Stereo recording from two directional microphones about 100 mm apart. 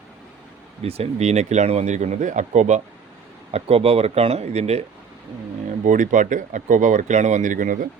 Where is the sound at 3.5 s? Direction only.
75° right (ahead or behind).